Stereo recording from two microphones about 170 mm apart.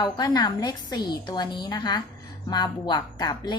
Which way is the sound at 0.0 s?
25° left (ahead or behind).